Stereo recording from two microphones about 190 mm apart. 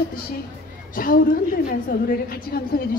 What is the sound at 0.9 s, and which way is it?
A woman's voice, 50° left (ahead or behind).